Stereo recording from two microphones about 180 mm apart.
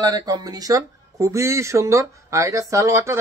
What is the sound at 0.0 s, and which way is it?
Speech, 20° right (ahead or behind).